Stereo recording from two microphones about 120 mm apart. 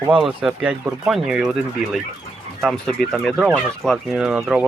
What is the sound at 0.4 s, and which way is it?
Speech, 10° right (ahead or behind).